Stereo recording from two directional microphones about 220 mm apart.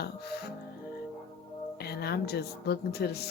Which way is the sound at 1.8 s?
45° left (ahead or behind).